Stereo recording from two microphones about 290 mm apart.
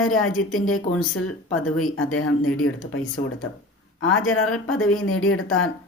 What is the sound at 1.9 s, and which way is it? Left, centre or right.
Speech, left.